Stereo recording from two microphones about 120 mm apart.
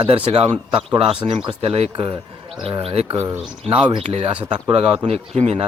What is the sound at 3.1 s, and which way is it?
Speech, 20° right (ahead or behind).